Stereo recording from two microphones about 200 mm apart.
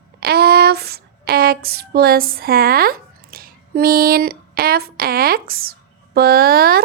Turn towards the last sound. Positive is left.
turn(degrees=-50)  # may be behind; listen again after turning